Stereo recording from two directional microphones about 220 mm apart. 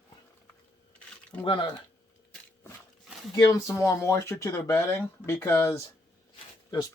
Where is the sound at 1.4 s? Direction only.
25° left (ahead or behind).